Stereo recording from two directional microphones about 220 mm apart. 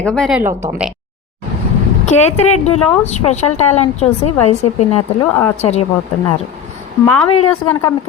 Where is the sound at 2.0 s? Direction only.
30° left (ahead or behind).